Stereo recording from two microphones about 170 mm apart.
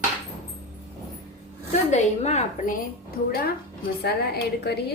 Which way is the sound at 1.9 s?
40° left (ahead or behind).